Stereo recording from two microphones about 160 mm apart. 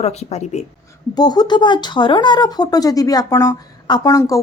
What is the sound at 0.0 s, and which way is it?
Speech, 40° left (ahead or behind).